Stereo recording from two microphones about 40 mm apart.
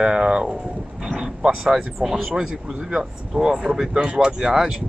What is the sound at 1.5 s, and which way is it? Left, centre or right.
Speech, centre.